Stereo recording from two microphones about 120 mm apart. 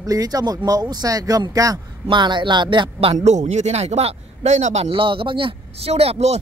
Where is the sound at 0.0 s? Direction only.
30° right (ahead or behind); by 3.3 s 50° right (ahead or behind).